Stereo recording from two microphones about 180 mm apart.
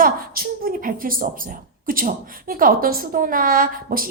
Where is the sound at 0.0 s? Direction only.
55° right (ahead or behind).